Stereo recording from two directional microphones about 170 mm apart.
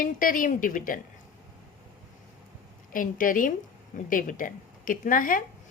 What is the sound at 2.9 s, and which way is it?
A woman's voice, 55° left (ahead or behind).